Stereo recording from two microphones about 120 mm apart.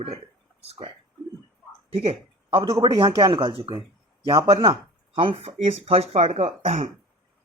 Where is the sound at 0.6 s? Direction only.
55° right (ahead or behind).